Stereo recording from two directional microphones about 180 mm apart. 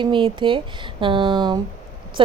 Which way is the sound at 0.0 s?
30° right (ahead or behind).